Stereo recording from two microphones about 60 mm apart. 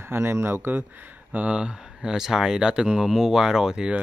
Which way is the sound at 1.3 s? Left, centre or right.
Centre.